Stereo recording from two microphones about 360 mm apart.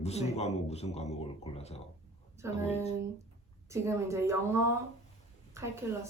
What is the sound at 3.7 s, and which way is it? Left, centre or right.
Speech, centre.